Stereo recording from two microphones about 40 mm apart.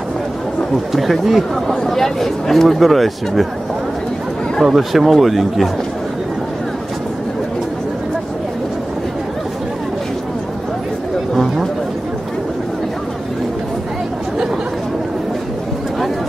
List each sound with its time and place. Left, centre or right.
0.9 s speech: centre
4.6 s speech: centre